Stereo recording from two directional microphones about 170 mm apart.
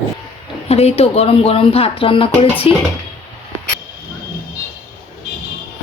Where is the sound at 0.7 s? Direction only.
35° left (ahead or behind).